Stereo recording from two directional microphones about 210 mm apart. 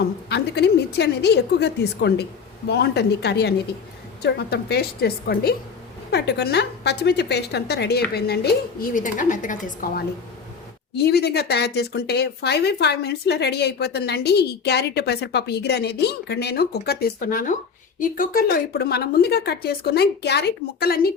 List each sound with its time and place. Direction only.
0.0 s a woman's voice: 50° left (ahead or behind)
10.9 s speech: 50° left (ahead or behind)